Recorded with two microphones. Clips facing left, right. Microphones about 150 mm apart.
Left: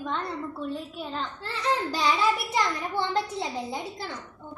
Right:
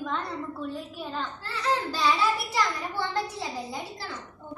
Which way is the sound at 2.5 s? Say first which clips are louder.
Left 1 dB; 20° left (ahead or behind).